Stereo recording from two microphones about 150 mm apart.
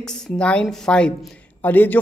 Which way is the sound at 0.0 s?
5° left (ahead or behind).